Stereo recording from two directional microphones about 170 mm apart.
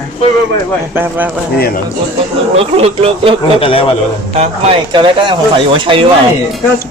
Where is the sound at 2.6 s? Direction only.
35° right (ahead or behind).